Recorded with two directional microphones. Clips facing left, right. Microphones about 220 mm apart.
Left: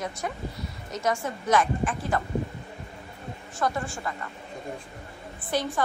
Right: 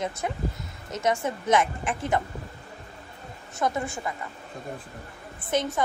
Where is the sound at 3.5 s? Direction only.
20° right (ahead or behind).